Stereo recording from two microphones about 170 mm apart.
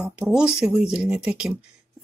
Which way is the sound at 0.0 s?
5° right (ahead or behind).